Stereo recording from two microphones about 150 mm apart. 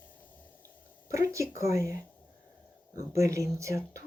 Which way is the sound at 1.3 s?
20° right (ahead or behind).